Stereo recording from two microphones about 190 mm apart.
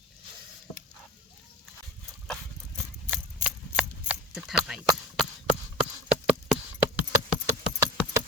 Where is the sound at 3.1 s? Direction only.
5° right (ahead or behind).